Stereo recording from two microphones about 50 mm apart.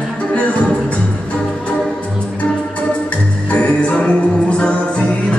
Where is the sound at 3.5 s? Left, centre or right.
Left.